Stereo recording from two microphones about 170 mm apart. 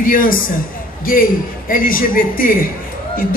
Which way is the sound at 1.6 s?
55° left (ahead or behind).